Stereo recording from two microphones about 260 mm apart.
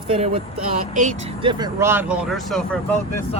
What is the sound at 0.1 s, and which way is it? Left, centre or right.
Speech, right.